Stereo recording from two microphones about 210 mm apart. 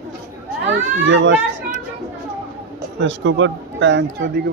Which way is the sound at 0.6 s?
60° right (ahead or behind).